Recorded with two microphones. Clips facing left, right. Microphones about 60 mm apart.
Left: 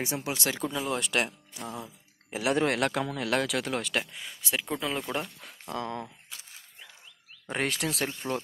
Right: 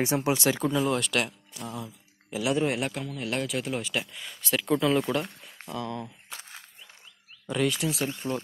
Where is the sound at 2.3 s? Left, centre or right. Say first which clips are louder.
Right 1 dB; left.